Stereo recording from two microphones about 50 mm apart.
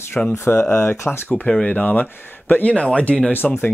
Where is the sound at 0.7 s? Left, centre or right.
Left.